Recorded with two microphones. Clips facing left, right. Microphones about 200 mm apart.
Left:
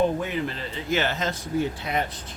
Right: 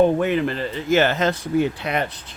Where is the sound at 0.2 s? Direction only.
65° right (ahead or behind).